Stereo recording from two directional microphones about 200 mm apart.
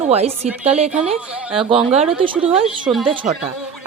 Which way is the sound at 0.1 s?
30° right (ahead or behind).